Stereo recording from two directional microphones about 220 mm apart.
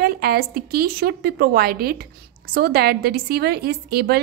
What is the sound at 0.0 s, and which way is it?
A woman's voice, 45° right (ahead or behind).